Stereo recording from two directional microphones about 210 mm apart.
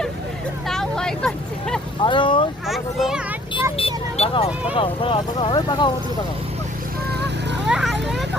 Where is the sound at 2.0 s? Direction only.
25° left (ahead or behind).